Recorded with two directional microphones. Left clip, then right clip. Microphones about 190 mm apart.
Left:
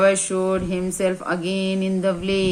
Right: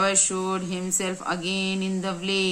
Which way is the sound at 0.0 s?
30° right (ahead or behind).